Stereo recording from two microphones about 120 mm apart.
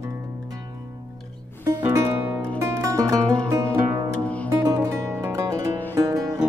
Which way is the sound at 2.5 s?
25° right (ahead or behind).